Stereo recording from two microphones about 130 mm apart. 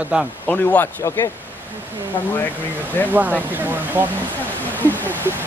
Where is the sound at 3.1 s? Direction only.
15° right (ahead or behind).